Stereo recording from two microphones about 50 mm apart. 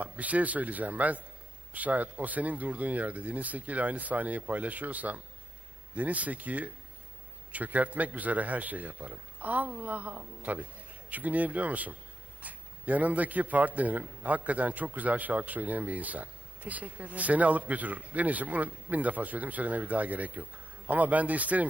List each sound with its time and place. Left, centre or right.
0.0 s a man's voice: right